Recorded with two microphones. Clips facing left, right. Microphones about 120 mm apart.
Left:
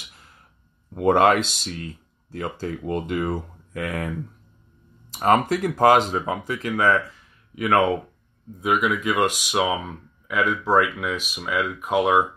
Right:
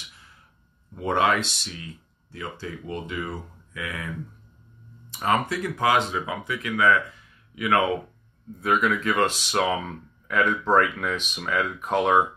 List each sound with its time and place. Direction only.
1.0 s speech: 45° left (ahead or behind)
5.1 s speech: 40° left (ahead or behind)
8.5 s speech: 10° left (ahead or behind)